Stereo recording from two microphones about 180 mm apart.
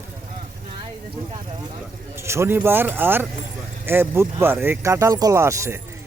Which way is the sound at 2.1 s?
15° right (ahead or behind).